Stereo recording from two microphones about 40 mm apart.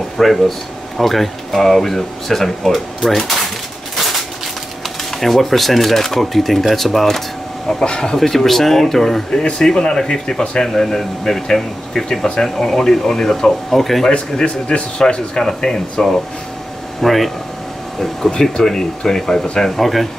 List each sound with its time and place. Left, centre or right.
0.2 s speech: centre
3.9 s a sound: centre
5.2 s speech: centre
7.8 s speech: centre
8.2 s speech: centre
14.0 s speech: left
19.8 s speech: centre